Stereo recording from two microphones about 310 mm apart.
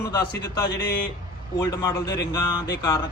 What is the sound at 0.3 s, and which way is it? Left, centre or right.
Speech, left.